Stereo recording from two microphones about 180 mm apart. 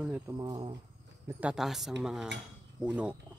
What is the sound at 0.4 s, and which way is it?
Speech, 25° right (ahead or behind).